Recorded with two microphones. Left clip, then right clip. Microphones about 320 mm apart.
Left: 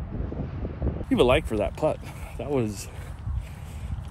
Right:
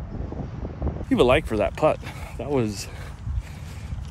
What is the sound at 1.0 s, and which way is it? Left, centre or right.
Speech, centre.